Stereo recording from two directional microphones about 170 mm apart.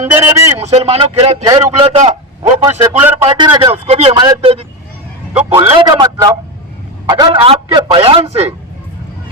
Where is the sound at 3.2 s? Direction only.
25° right (ahead or behind).